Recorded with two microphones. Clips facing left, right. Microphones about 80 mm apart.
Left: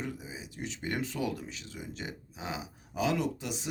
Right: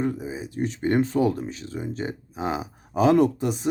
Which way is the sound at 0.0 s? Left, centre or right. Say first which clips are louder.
Right 12 dB; right.